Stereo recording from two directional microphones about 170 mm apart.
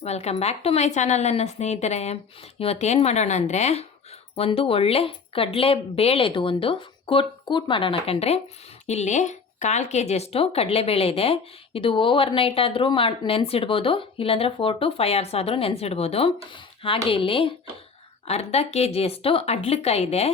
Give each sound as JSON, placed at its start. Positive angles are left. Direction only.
{"t": 0.0, "sound": "speech", "side_deg": 40}